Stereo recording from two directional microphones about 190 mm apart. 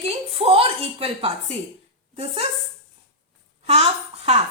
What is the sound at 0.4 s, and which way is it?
A woman's voice, 30° right (ahead or behind).